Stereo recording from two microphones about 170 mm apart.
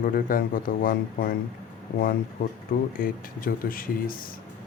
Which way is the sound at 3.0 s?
55° left (ahead or behind).